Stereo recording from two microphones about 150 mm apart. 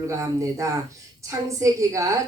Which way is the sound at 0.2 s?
20° right (ahead or behind).